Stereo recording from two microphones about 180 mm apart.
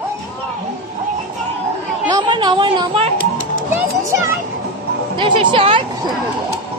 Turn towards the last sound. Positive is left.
turn(degrees=-30)  # may be behind; listen again after turning